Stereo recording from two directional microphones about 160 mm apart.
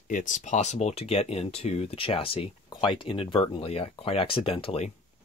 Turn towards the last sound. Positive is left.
turn(degrees=40)  # may be behind; listen again after turning